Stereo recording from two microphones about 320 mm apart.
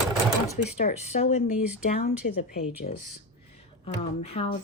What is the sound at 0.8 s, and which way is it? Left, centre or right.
Speech, left.